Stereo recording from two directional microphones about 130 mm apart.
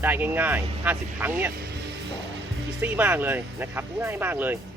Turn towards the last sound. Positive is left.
turn(degrees=-15)  # may be behind; listen again after turning